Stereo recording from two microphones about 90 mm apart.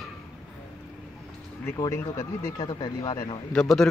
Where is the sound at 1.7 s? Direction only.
45° left (ahead or behind).